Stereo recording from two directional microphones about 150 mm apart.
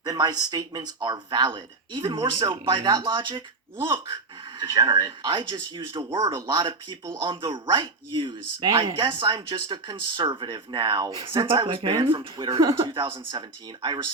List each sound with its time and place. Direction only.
0.0 s speech: 25° right (ahead or behind)